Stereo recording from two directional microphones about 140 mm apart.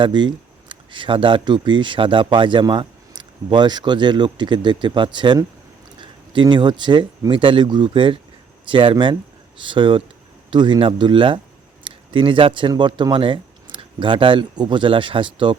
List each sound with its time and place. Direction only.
0.0 s speech: 35° right (ahead or behind)